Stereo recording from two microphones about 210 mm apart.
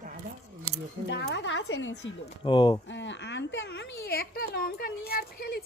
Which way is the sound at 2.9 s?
60° left (ahead or behind).